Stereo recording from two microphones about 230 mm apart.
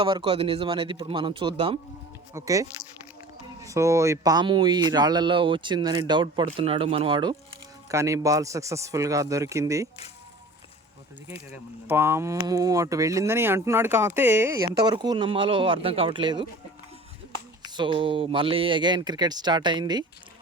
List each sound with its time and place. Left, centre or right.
0.0 s speech: right
11.5 s speech: centre
17.7 s speech: right